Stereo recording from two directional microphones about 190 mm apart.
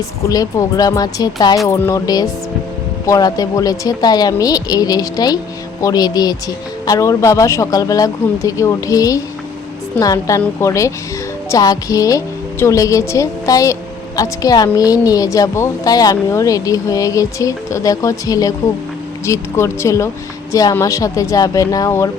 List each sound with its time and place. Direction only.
0.3 s a woman's voice: 15° left (ahead or behind)